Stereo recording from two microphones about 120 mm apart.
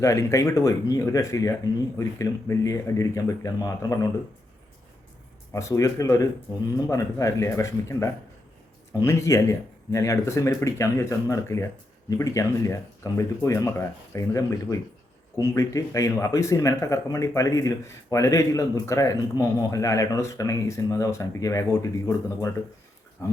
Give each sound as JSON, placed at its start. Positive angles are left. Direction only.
{"t": 0.0, "sound": "speech", "side_deg": 25}
{"t": 5.5, "sound": "speech", "side_deg": 25}